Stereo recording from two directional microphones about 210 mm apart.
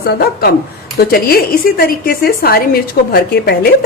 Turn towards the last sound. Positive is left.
turn(degrees=45)  # may be behind; listen again after turning